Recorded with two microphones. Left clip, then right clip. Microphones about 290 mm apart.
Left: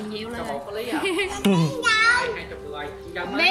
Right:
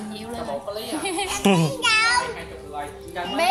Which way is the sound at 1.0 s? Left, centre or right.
Centre.